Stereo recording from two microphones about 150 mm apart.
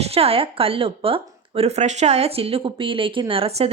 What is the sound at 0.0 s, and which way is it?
Speech, 40° right (ahead or behind).